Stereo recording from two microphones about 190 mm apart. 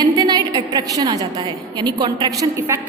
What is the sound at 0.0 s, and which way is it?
A woman's voice, 20° right (ahead or behind).